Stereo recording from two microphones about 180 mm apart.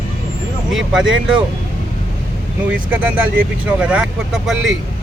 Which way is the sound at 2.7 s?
10° right (ahead or behind).